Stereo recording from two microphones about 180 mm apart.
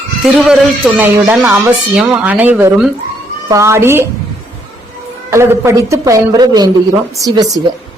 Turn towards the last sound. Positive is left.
turn(degrees=-20)  # may be behind; listen again after turning